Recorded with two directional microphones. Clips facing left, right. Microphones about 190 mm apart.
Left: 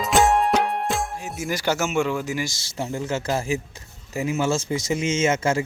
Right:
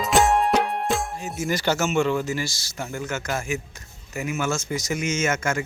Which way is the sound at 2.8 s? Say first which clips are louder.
Left 3 dB; 30° left (ahead or behind).